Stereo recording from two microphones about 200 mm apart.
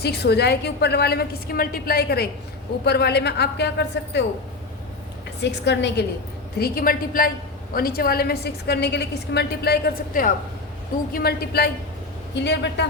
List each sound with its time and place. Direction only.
0.0 s a woman's voice: 55° left (ahead or behind)
5.4 s a woman's voice: 60° left (ahead or behind)
6.6 s a woman's voice: 45° left (ahead or behind)